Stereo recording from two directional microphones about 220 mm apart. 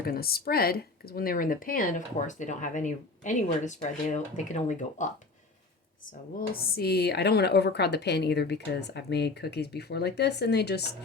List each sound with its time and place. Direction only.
0.0 s speech: 45° left (ahead or behind)
6.3 s speech: 40° left (ahead or behind)